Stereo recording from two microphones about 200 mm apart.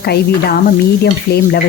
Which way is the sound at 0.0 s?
55° left (ahead or behind).